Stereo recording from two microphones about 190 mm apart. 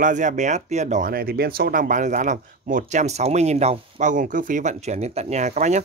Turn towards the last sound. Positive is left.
turn(degrees=-40)  # may be behind; listen again after turning